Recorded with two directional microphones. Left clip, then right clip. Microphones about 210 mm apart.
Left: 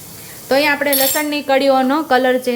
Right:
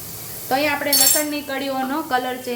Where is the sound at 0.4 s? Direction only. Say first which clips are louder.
Left 6 dB; 50° left (ahead or behind).